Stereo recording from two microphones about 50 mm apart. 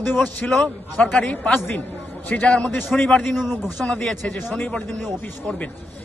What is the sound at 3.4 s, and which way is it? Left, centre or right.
Speech, centre.